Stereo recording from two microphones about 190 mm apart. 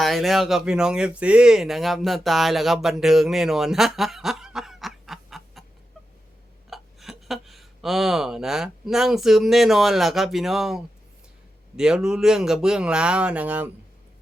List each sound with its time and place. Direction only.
0.0 s speech: centre (ahead or behind)
6.7 s speech: centre (ahead or behind)